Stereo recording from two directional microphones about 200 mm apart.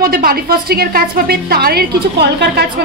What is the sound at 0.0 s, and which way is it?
A woman's voice, 45° right (ahead or behind).